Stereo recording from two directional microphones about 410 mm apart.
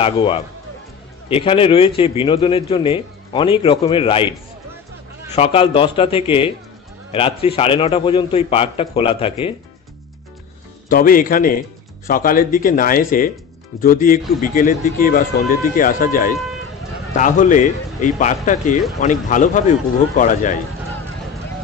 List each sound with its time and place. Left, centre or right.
0.0 s a man's voice: centre
5.3 s a man's voice: centre
10.9 s a man's voice: centre